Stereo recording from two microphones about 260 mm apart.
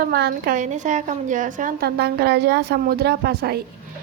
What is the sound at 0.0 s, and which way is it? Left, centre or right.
A woman's voice, right.